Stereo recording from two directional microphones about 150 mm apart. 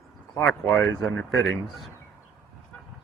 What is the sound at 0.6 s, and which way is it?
Speech, 15° left (ahead or behind).